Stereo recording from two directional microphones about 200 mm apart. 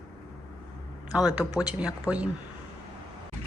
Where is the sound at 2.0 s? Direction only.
5° right (ahead or behind).